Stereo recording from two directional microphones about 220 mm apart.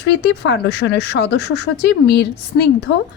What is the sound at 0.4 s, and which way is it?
A woman's voice, 50° left (ahead or behind).